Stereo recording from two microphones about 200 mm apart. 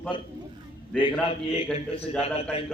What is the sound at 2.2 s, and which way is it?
Speech, 30° left (ahead or behind).